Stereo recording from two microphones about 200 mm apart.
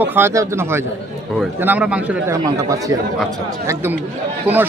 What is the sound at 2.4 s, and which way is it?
Speech, 15° right (ahead or behind).